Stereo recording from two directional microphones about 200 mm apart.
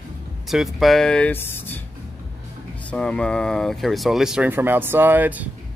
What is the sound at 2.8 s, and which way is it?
Speech, 5° left (ahead or behind).